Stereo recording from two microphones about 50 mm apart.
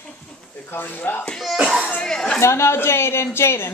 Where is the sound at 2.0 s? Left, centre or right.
Centre.